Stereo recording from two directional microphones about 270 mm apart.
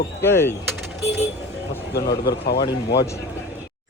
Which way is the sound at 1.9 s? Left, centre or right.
Left.